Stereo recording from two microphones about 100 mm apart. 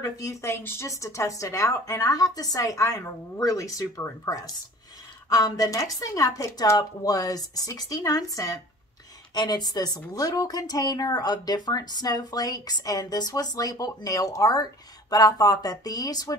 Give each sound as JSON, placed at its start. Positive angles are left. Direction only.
{"t": 0.0, "sound": "a woman's voice", "side_deg": 35}